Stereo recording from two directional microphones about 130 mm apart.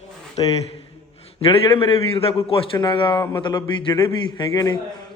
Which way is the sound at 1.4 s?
40° left (ahead or behind).